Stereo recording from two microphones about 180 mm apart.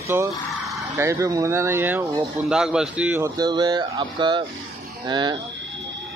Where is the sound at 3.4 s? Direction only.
25° right (ahead or behind).